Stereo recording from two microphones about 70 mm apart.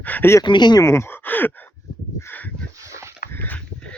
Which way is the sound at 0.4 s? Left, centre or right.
Left.